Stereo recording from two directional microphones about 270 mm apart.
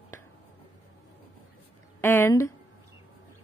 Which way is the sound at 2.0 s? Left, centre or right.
Centre.